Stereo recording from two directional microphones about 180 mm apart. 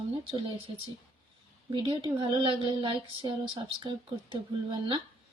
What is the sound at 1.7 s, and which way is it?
Speech, 30° right (ahead or behind).